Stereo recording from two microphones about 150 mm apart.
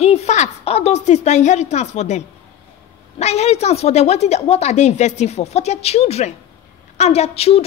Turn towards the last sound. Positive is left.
turn(degrees=45)  # may be behind; listen again after turning